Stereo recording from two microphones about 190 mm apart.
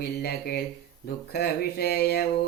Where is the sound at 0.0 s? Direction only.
55° left (ahead or behind).